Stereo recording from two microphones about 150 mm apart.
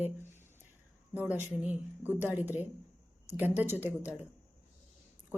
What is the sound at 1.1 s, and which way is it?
Speech, 10° right (ahead or behind).